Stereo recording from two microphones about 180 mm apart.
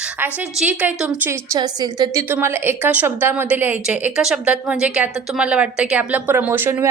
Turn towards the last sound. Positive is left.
turn(degrees=-10)  # may be behind; listen again after turning